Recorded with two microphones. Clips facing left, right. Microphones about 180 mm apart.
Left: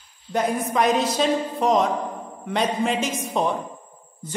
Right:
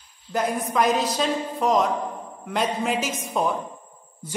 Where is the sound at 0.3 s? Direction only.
Centre (ahead or behind).